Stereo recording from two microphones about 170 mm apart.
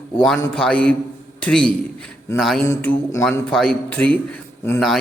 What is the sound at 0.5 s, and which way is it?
A man's voice, 5° left (ahead or behind).